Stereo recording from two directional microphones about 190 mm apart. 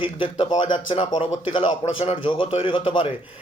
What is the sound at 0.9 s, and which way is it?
A man's voice, 25° left (ahead or behind).